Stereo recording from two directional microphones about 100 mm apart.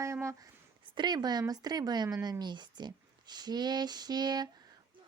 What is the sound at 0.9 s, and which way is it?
A child's voice, 45° right (ahead or behind).